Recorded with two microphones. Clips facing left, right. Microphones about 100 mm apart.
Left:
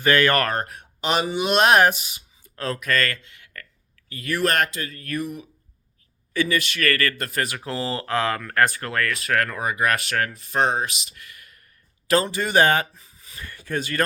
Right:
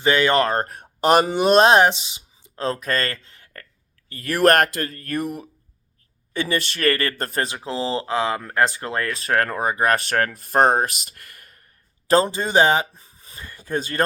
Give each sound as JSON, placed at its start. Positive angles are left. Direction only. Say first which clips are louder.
{"t": 0.0, "sound": "speech", "louder": "right 1 dB", "side_deg": -20}
{"t": 0.5, "sound": "speech", "louder": "right 3 dB", "side_deg": -40}
{"t": 4.1, "sound": "speech", "louder": "right 6 dB", "side_deg": -45}
{"t": 6.3, "sound": "speech", "louder": "left 1 dB", "side_deg": -25}
{"t": 13.0, "sound": "a sound", "louder": "right 1 dB", "side_deg": -35}
{"t": 13.3, "sound": "a sound", "louder": "even", "side_deg": -20}
{"t": 13.7, "sound": "speech", "louder": "right 1 dB", "side_deg": -30}